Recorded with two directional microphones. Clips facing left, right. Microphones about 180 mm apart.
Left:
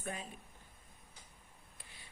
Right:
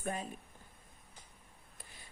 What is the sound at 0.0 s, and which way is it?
Speech, 45° right (ahead or behind).